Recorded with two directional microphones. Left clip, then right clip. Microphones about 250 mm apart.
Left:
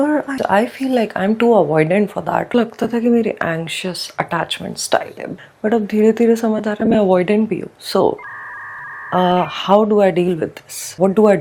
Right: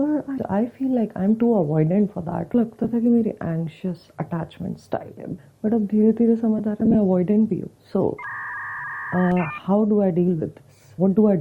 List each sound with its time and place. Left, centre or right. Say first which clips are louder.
0.0 s speech: left 7 dB; centre
1.5 s speech: left 9 dB; left
1.7 s speech: left 8 dB; centre
9.4 s speech: left 9 dB; centre
9.7 s speech: left 8 dB; left
10.0 s speech: left 8 dB; centre
11.0 s speech: left 7 dB; left